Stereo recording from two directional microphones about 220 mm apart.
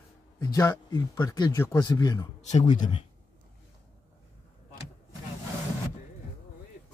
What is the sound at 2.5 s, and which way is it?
Speech, 30° left (ahead or behind).